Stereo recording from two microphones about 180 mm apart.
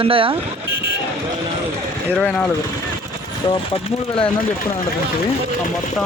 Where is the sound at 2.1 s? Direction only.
5° left (ahead or behind).